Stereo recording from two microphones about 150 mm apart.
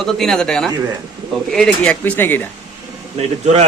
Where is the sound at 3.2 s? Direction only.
45° right (ahead or behind).